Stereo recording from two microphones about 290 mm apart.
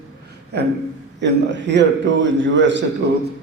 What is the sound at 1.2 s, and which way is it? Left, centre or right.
A man's voice, right.